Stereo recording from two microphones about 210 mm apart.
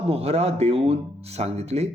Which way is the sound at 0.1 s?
30° right (ahead or behind).